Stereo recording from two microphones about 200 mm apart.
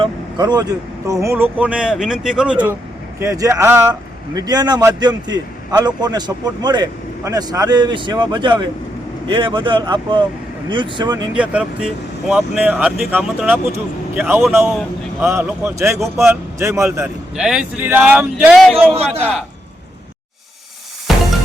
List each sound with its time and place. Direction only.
0.0 s speech: 20° right (ahead or behind)
11.3 s speech: 5° right (ahead or behind)
17.3 s speech: 5° right (ahead or behind)
21.1 s music: centre (ahead or behind)